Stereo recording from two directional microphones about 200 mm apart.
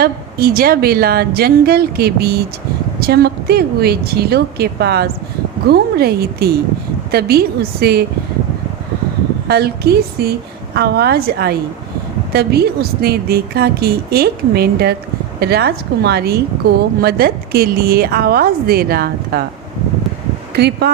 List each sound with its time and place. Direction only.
0.0 s a woman's voice: 50° right (ahead or behind)
9.5 s a woman's voice: 50° right (ahead or behind)
20.6 s speech: 55° right (ahead or behind)